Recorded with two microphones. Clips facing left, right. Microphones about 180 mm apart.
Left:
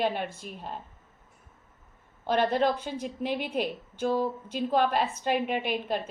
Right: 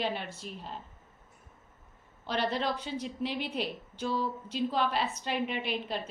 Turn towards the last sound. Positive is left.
turn(degrees=50)  # may be behind; listen again after turning